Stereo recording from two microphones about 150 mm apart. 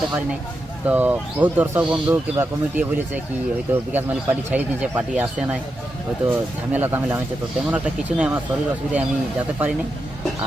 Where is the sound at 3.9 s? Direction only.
10° right (ahead or behind).